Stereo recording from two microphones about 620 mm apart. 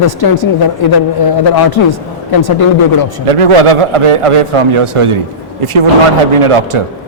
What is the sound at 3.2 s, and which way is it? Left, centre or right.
Speech, right.